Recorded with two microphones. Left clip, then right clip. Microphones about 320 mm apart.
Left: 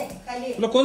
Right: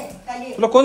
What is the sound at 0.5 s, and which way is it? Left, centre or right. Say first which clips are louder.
Speech: right 7 dB; centre.